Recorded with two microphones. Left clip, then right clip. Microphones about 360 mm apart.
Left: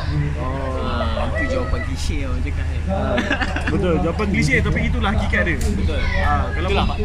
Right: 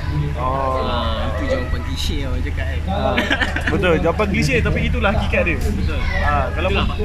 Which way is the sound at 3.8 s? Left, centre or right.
Centre.